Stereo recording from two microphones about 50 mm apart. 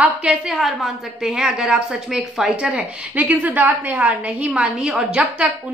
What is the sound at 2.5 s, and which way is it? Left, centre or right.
Speech, right.